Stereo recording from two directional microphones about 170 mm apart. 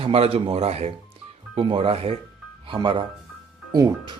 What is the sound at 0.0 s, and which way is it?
Speech, 35° right (ahead or behind).